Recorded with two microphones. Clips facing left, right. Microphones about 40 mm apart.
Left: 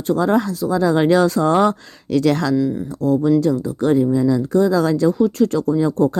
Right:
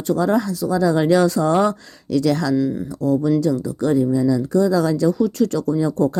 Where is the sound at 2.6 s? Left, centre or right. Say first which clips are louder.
Left 1 dB; centre.